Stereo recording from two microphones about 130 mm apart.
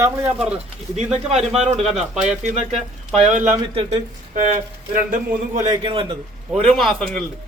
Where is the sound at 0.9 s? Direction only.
60° right (ahead or behind).